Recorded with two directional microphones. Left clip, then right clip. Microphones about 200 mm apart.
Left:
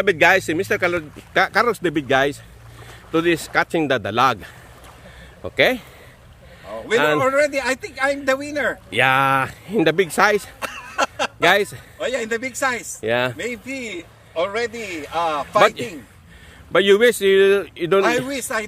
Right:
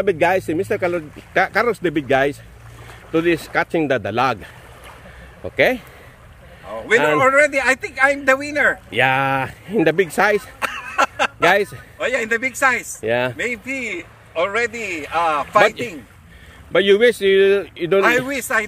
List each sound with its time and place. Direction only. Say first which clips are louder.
0.0 s a man's voice: left 2 dB; 5° left (ahead or behind)